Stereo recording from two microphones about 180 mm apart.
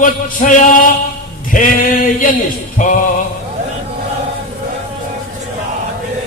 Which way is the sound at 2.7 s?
45° left (ahead or behind).